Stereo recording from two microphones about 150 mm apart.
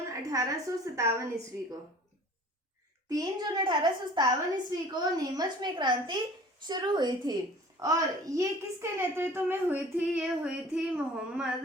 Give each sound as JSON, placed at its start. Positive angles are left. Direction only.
{"t": 0.3, "sound": "a woman's voice", "side_deg": -20}
{"t": 3.1, "sound": "a woman's voice", "side_deg": -25}